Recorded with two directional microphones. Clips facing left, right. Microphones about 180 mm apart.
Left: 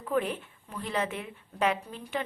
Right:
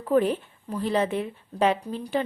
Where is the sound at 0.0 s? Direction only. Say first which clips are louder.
Right 7 dB; 35° right (ahead or behind).